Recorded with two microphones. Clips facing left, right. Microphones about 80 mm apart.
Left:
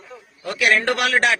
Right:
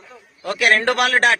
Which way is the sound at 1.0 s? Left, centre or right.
Right.